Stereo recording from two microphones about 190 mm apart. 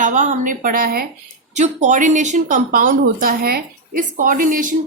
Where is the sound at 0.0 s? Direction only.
40° right (ahead or behind).